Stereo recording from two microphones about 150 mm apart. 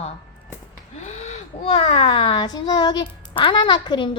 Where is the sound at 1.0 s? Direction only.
50° left (ahead or behind); by 4.1 s 35° left (ahead or behind).